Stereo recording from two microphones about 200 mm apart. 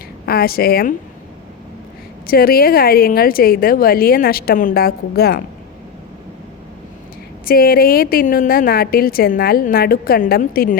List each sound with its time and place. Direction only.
0.3 s a woman's voice: 50° left (ahead or behind)
2.2 s a woman's voice: 50° left (ahead or behind)
7.4 s a woman's voice: 50° left (ahead or behind)